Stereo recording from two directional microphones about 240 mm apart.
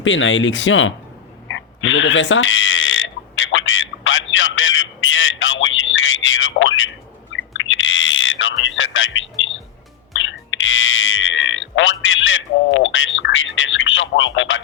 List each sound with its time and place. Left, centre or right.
0.0 s speech: left
1.5 s a sound: left
10.2 s music: left